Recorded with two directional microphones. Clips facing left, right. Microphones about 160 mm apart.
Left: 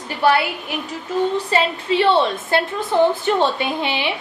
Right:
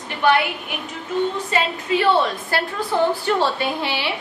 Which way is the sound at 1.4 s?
30° left (ahead or behind).